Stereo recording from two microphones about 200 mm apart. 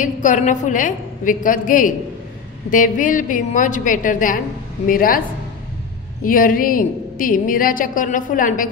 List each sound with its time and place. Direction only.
0.0 s a woman's voice: 40° left (ahead or behind)
6.2 s a woman's voice: 45° left (ahead or behind)